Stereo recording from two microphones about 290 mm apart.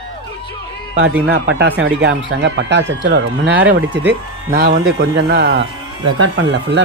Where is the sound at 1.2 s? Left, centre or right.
Right.